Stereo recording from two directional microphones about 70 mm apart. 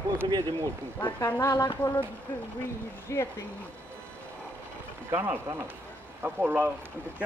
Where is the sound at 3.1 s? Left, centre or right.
Left.